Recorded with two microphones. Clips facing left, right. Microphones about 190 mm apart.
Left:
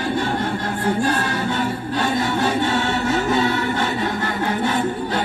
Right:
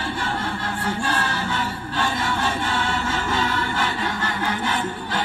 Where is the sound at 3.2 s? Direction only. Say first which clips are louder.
Left 5 dB; 45° left (ahead or behind).